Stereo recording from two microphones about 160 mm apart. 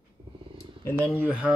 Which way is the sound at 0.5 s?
15° left (ahead or behind).